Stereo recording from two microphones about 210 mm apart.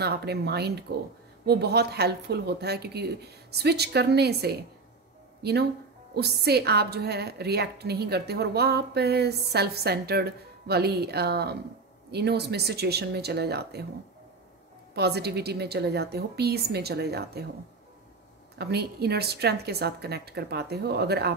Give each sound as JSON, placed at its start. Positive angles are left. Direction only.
{"t": 0.0, "sound": "a woman's voice", "side_deg": -50}
{"t": 15.0, "sound": "a woman's voice", "side_deg": -50}
{"t": 18.6, "sound": "a woman's voice", "side_deg": -50}